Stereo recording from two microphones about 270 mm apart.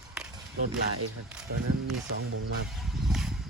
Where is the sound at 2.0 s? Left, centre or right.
Right.